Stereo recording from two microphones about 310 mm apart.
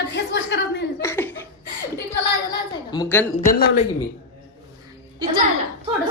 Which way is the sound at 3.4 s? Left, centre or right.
Left.